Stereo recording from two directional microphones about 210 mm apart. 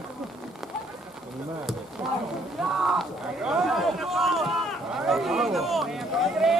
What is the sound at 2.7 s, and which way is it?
Speech, centre (ahead or behind).